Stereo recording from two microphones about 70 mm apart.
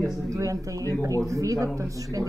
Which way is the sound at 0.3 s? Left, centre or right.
Right.